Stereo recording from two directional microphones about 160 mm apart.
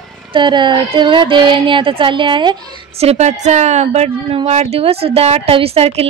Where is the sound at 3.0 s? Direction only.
45° right (ahead or behind).